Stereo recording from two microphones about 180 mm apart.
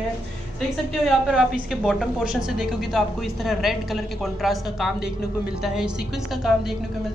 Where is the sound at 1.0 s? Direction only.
5° right (ahead or behind).